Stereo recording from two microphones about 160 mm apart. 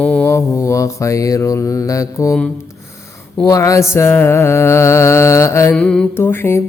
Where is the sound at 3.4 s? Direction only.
20° left (ahead or behind).